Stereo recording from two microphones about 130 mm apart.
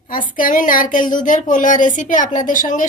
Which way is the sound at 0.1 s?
90° left.